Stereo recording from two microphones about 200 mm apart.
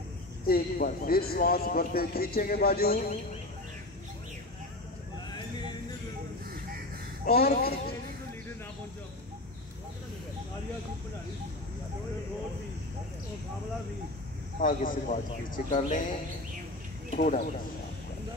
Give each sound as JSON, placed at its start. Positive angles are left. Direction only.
{"t": 0.5, "sound": "a man's voice", "side_deg": 45}
{"t": 7.2, "sound": "a man's voice", "side_deg": 50}
{"t": 14.6, "sound": "a man's voice", "side_deg": 45}
{"t": 17.1, "sound": "speech", "side_deg": 40}